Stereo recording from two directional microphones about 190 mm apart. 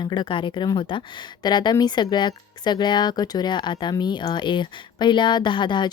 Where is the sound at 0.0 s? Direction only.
25° left (ahead or behind).